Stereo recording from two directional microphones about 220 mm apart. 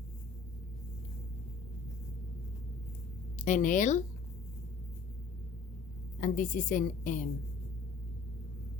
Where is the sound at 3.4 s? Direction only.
35° left (ahead or behind).